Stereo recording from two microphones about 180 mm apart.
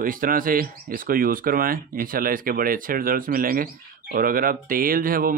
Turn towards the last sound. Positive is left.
turn(degrees=-50)  # may be behind; listen again after turning